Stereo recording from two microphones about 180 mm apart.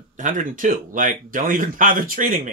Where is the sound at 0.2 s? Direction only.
45° right (ahead or behind).